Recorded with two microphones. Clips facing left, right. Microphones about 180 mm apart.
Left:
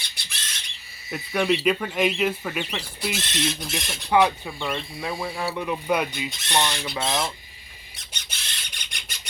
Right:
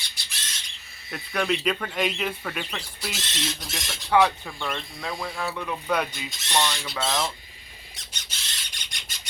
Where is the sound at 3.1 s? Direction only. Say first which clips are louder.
Left 6 dB; 55° left (ahead or behind).